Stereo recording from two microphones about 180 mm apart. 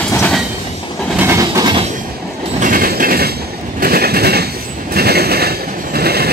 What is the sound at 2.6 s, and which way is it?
Train, 50° right (ahead or behind).